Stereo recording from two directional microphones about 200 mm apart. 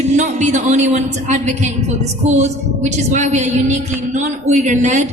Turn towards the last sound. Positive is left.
turn(degrees=-35)  # may be behind; listen again after turning